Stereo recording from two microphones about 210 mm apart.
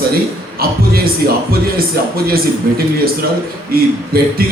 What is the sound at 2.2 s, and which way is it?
A man's voice, 45° right (ahead or behind).